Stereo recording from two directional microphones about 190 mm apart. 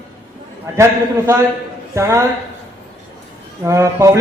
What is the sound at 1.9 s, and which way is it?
Speech, 15° right (ahead or behind).